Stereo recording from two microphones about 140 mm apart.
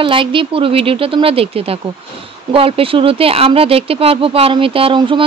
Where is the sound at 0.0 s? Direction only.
40° right (ahead or behind).